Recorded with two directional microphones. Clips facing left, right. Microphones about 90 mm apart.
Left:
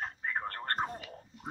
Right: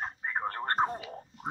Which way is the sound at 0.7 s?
35° right (ahead or behind).